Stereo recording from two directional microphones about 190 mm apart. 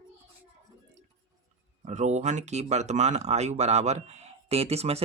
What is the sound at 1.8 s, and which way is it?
Speech, 35° right (ahead or behind).